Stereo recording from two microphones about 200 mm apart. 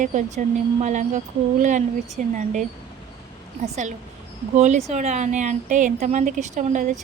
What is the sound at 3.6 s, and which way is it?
A woman's voice, 35° right (ahead or behind).